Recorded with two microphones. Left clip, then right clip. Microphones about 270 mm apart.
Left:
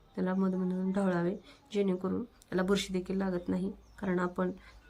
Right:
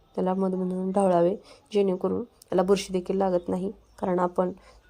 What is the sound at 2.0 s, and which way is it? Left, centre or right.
A woman's voice, right.